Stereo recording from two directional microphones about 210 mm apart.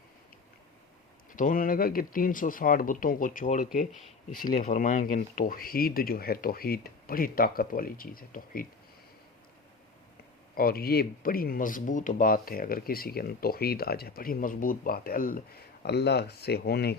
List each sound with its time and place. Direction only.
1.3 s speech: 40° left (ahead or behind)
3.9 s speech: centre (ahead or behind)
4.4 s speech: 40° left (ahead or behind)
10.5 s speech: 45° left (ahead or behind)